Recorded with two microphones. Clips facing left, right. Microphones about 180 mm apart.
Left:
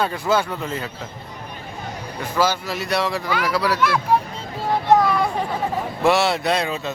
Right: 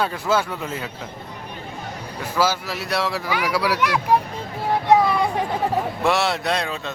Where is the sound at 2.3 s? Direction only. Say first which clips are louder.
Left 1 dB; 5° right (ahead or behind).